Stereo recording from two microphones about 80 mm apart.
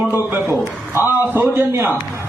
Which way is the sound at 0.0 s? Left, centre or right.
Right.